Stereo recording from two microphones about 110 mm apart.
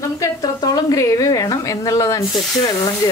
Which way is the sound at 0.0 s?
30° left (ahead or behind).